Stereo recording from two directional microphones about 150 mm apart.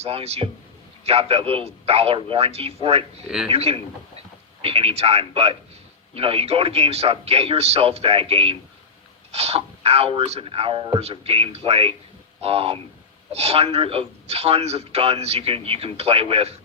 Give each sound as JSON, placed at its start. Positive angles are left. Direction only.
{"t": 0.0, "sound": "a man's voice", "side_deg": -40}
{"t": 3.2, "sound": "speech", "side_deg": -5}
{"t": 3.5, "sound": "a man's voice", "side_deg": -40}